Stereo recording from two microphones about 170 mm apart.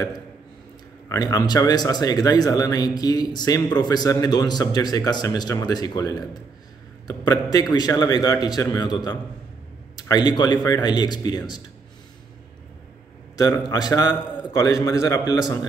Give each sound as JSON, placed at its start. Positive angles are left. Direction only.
{"t": 1.0, "sound": "speech", "side_deg": 20}
{"t": 13.4, "sound": "speech", "side_deg": 20}